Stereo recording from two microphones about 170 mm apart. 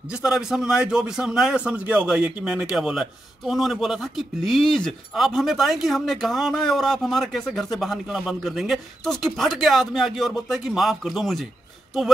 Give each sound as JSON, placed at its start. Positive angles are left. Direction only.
{"t": 0.1, "sound": "a man's voice", "side_deg": -5}